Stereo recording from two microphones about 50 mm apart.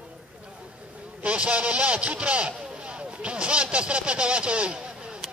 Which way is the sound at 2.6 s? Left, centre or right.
Right.